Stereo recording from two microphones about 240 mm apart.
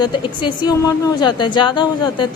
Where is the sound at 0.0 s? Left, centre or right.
Centre.